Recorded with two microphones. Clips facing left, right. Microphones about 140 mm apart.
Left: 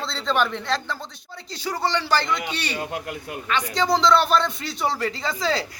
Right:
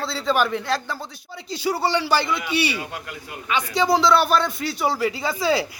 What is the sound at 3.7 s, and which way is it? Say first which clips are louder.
Speech: right 1 dB; 10° right (ahead or behind).